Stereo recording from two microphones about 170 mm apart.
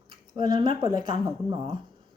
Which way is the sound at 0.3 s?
30° right (ahead or behind).